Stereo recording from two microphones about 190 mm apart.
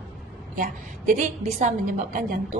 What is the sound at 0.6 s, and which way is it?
A woman's voice, 45° right (ahead or behind).